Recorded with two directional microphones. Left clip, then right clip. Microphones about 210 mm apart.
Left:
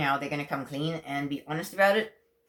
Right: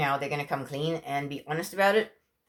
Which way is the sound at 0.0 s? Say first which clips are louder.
Even; 35° right (ahead or behind).